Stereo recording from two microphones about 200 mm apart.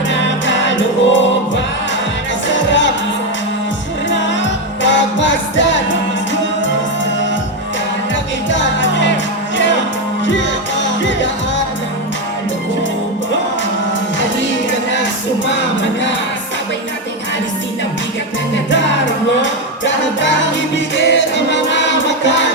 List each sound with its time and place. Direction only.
0.1 s music: 65° left (ahead or behind)
4.1 s music: 65° left (ahead or behind)
8.4 s music: 65° left (ahead or behind)
18.5 s music: 65° left (ahead or behind)